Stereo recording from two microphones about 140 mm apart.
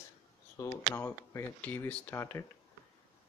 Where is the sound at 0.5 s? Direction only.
20° left (ahead or behind).